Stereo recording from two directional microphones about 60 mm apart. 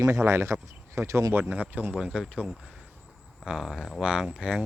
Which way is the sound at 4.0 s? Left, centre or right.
Centre.